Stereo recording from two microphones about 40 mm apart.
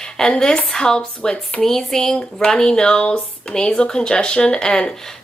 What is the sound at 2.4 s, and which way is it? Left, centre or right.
Speech, left.